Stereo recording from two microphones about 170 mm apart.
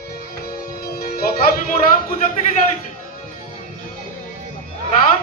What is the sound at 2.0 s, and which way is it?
Speech, 55° left (ahead or behind).